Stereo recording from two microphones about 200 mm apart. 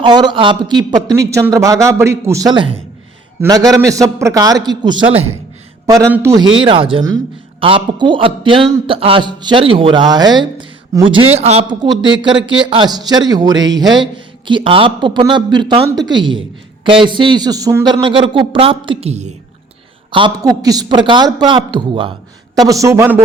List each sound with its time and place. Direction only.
0.0 s a man's voice: 20° right (ahead or behind)
5.8 s a man's voice: 15° right (ahead or behind)